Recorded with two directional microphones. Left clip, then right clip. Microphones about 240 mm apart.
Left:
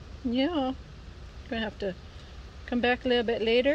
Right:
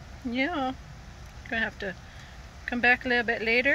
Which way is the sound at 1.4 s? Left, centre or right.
Left.